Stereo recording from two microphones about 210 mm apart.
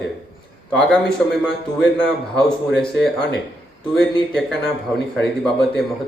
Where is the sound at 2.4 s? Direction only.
5° left (ahead or behind).